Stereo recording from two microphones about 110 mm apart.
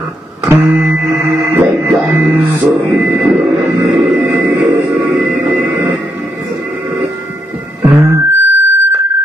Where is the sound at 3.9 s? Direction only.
15° right (ahead or behind).